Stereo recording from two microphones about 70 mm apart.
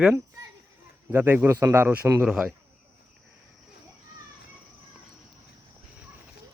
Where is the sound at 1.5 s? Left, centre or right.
Right.